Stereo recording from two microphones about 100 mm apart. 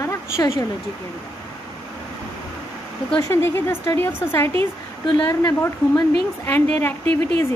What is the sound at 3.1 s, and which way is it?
Speech, 30° left (ahead or behind).